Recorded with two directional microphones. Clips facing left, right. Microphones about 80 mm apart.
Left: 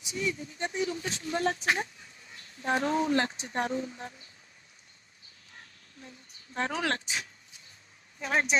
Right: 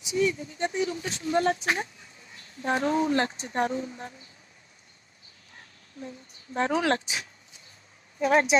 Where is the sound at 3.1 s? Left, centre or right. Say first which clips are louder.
Right 2 dB; right.